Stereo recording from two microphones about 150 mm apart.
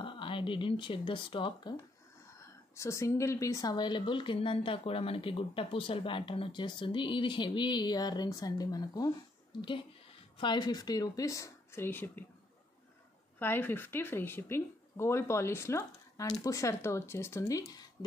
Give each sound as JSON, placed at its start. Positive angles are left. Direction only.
{"t": 0.0, "sound": "speech", "side_deg": 35}
{"t": 2.4, "sound": "a woman's voice", "side_deg": 20}
{"t": 10.3, "sound": "a woman's voice", "side_deg": 30}
{"t": 13.4, "sound": "speech", "side_deg": 15}